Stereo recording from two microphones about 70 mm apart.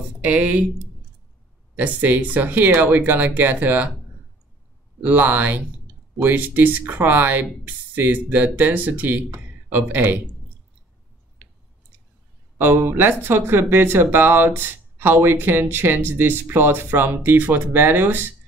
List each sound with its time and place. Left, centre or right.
0.2 s speech: right
1.8 s speech: right
5.0 s speech: right
12.5 s speech: right